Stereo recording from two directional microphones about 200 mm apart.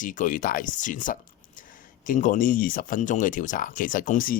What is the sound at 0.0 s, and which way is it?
Speech, 40° left (ahead or behind).